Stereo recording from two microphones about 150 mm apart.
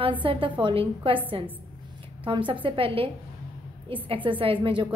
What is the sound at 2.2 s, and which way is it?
Speech, 35° right (ahead or behind).